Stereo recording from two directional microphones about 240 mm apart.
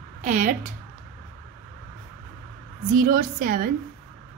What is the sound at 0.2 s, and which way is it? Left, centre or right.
Speech, right.